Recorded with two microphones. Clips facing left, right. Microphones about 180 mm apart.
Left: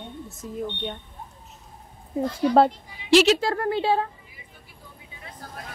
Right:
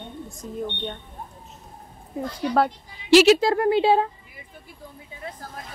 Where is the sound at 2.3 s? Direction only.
25° left (ahead or behind).